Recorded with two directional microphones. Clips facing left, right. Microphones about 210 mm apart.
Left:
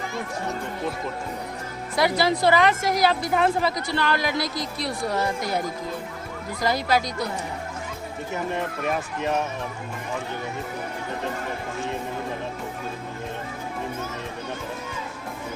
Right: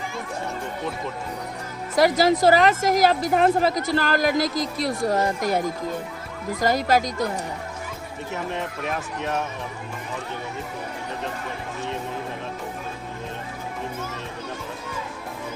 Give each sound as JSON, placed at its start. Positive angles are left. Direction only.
{"t": 2.0, "sound": "a woman's voice", "side_deg": -45}
{"t": 4.4, "sound": "a woman's voice", "side_deg": -90}
{"t": 4.8, "sound": "a woman's voice", "side_deg": -45}
{"t": 6.6, "sound": "a woman's voice", "side_deg": -45}
{"t": 8.3, "sound": "speech", "side_deg": 0}